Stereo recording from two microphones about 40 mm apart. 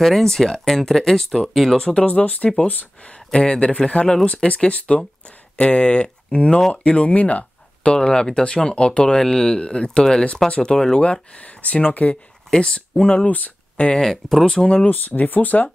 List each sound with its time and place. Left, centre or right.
0.0 s speech: centre
1.8 s speech: left
2.0 s speech: left
3.3 s speech: left
7.9 s speech: left
11.0 s speech: left
12.4 s speech: left
13.9 s speech: centre
14.9 s speech: left